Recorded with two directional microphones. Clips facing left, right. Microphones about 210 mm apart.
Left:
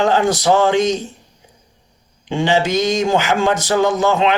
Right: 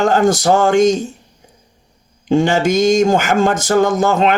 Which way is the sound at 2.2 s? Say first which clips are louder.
Right 4 dB; 45° right (ahead or behind).